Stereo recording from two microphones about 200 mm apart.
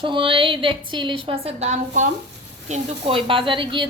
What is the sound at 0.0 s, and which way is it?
A woman's voice, 25° right (ahead or behind).